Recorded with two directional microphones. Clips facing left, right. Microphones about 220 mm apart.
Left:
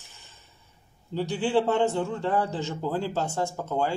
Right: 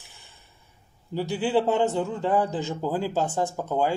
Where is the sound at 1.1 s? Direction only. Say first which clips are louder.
Right 1 dB; 10° right (ahead or behind).